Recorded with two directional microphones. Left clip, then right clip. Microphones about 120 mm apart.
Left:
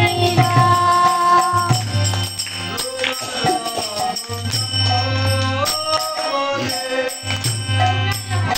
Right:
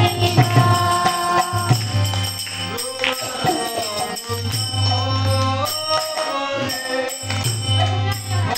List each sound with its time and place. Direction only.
0.0 s music: 30° left (ahead or behind)